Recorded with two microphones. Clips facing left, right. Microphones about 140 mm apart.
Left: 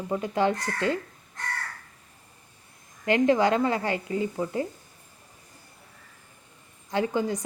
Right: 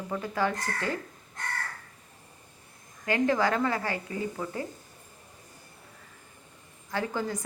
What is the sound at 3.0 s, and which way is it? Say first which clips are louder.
A woman's voice: left 4 dB; 20° left (ahead or behind).